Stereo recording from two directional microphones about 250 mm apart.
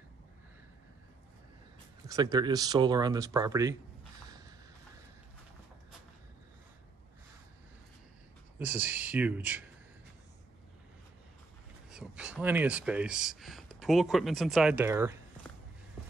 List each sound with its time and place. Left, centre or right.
2.0 s speech: centre
8.5 s speech: centre
11.9 s speech: centre